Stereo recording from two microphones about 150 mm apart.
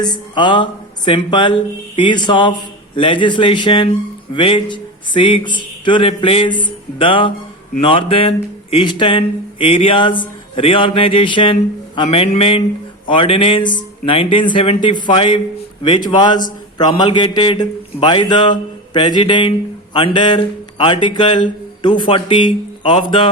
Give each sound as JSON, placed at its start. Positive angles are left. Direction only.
{"t": 0.0, "sound": "a man's voice", "side_deg": 30}